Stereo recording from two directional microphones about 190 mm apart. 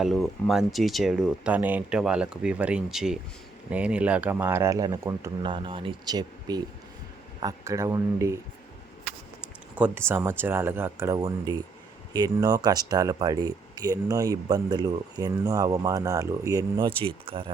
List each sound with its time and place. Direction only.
0.0 s speech: centre (ahead or behind)
9.7 s speech: 10° right (ahead or behind); by 17.5 s 30° right (ahead or behind)